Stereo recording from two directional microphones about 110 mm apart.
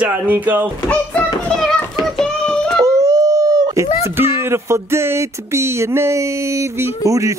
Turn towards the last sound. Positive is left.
turn(degrees=-30)  # may be behind; listen again after turning